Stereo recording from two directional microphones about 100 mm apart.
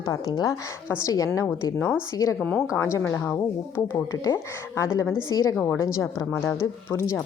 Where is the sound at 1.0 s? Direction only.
35° left (ahead or behind).